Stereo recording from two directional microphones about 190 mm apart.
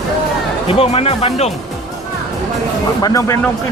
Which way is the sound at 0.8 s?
30° left (ahead or behind).